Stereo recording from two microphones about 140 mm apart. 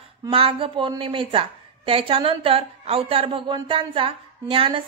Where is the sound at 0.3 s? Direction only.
40° right (ahead or behind).